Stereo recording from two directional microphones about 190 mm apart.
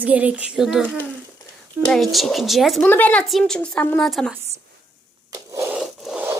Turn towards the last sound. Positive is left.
turn(degrees=-5)  # may be behind; listen again after turning